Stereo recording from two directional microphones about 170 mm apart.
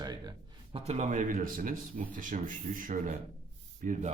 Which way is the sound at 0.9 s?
45° right (ahead or behind).